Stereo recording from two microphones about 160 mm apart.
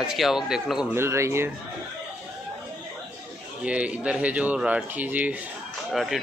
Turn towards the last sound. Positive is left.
turn(degrees=0)  # may be behind; listen again after turning